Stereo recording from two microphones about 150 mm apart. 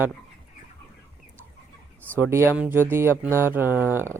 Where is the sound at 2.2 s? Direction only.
15° right (ahead or behind).